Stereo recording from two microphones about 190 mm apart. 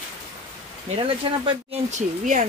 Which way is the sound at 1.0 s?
25° right (ahead or behind).